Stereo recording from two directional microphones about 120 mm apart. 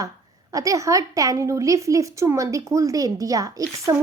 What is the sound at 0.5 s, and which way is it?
A woman's voice, 25° right (ahead or behind).